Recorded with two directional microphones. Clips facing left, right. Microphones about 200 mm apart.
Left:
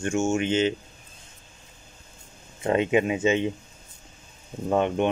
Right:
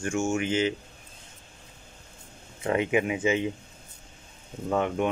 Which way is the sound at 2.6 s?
25° left (ahead or behind).